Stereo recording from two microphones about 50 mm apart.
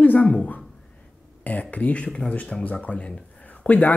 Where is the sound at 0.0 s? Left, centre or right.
Left.